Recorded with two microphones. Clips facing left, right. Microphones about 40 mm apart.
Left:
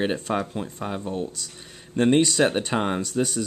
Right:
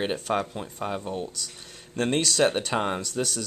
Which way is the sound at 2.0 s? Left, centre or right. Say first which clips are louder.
Left 4 dB; centre.